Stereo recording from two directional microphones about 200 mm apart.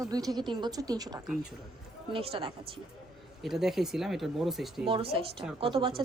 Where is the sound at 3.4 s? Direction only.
Centre (ahead or behind).